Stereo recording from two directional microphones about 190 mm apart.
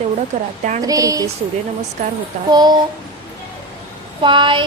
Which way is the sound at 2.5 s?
20° right (ahead or behind).